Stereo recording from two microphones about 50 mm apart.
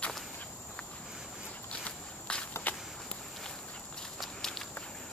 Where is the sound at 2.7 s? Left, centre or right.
Left.